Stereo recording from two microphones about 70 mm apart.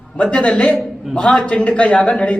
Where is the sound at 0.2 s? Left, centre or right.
Centre.